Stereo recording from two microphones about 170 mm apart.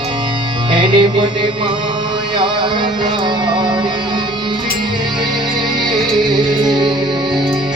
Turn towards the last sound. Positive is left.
turn(degrees=-25)  # may be behind; listen again after turning